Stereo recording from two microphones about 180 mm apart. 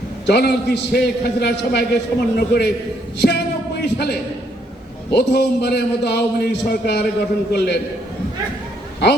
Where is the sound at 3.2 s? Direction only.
65° left (ahead or behind).